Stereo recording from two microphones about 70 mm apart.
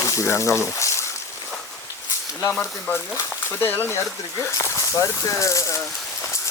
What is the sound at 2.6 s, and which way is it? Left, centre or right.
Speech, left.